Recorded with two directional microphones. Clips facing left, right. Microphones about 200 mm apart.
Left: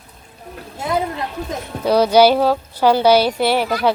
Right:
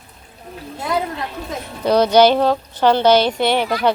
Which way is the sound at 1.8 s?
5° left (ahead or behind).